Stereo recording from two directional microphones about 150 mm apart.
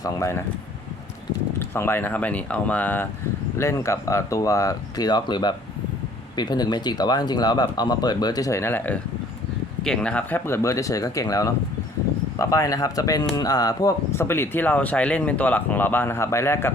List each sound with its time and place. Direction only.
0.0 s speech: 20° left (ahead or behind)
1.5 s speech: 15° left (ahead or behind)